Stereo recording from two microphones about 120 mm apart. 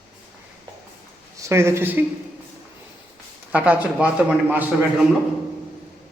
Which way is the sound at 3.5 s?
10° right (ahead or behind).